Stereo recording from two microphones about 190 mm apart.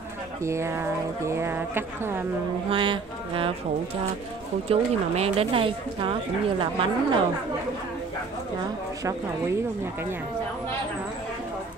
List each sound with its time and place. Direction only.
0.4 s speech: 15° right (ahead or behind)
2.7 s speech: 25° right (ahead or behind)
4.6 s speech: 30° right (ahead or behind)